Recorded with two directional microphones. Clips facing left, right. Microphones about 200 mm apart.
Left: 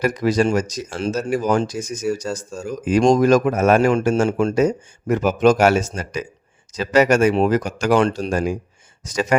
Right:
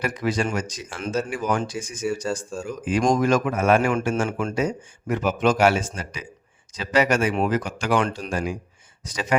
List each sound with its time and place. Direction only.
0.0 s speech: 40° left (ahead or behind)